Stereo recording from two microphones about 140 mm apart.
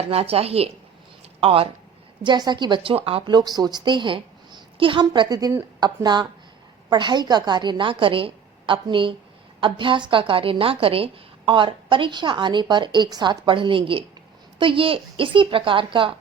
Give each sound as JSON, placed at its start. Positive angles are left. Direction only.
{"t": 0.0, "sound": "a woman's voice", "side_deg": -45}